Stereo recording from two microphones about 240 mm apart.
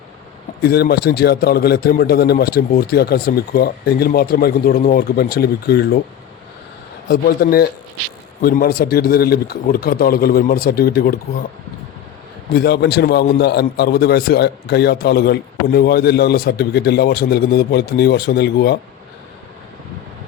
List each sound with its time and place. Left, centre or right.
0.6 s a man's voice: left
7.1 s a man's voice: left
12.5 s a man's voice: left